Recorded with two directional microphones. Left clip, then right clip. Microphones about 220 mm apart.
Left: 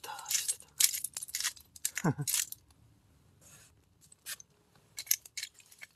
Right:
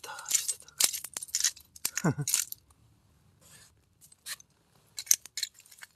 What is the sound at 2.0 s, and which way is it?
Speech, 25° right (ahead or behind).